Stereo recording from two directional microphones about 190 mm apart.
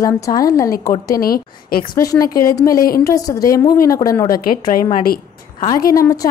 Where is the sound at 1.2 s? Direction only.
50° left (ahead or behind).